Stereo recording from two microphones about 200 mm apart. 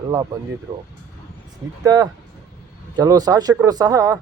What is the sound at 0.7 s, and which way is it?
Speech, 15° right (ahead or behind).